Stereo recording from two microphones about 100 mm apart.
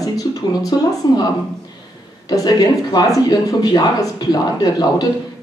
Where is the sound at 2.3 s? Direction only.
40° left (ahead or behind).